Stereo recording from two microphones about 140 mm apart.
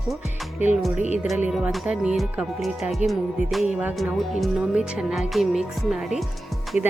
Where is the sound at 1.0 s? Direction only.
55° left (ahead or behind).